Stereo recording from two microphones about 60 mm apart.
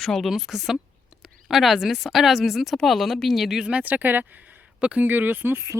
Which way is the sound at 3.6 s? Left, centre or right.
Right.